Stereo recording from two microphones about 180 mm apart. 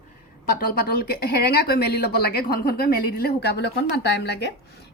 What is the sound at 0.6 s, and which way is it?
Speech, 60° left (ahead or behind).